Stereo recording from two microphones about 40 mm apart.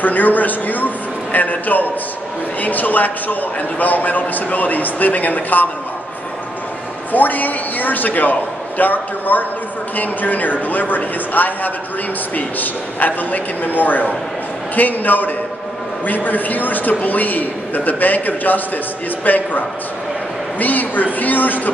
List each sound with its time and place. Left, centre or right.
0.0 s a man's voice: left
7.1 s a man's voice: left